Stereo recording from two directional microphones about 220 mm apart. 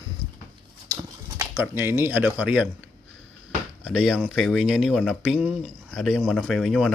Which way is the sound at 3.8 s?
5° right (ahead or behind).